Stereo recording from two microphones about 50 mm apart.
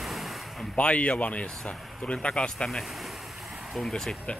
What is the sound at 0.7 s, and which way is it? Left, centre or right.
Speech, left.